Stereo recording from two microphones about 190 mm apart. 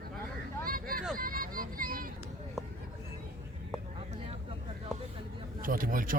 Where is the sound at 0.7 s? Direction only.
50° right (ahead or behind).